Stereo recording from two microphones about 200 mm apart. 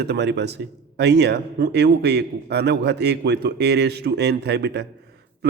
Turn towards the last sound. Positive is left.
turn(degrees=-55)  # may be behind; listen again after turning